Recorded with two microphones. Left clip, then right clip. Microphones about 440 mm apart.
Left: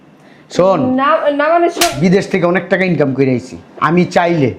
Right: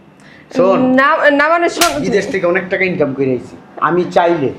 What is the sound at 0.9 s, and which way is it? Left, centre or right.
Speech, right.